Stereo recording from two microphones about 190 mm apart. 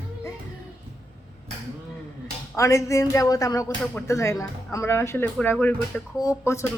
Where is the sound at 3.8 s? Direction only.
5° left (ahead or behind).